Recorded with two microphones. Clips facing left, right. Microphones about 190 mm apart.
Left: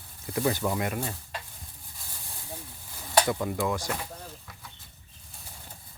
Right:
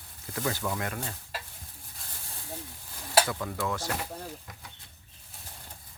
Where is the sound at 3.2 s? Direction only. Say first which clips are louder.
Left 4 dB; 20° left (ahead or behind).